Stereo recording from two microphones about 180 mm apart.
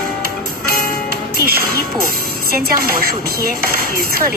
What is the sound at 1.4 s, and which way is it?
Speech, 55° right (ahead or behind).